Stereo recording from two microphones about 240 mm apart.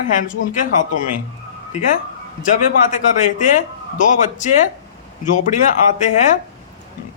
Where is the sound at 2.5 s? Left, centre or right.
Left.